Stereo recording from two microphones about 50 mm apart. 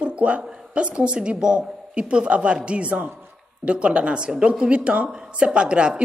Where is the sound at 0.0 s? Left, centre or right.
Right.